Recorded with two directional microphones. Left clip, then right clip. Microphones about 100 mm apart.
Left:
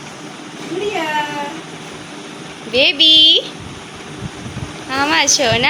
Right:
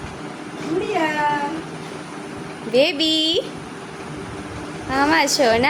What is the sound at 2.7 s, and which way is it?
Speech, 30° right (ahead or behind).